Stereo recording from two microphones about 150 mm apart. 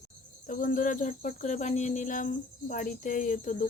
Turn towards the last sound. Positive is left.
turn(degrees=55)  # may be behind; listen again after turning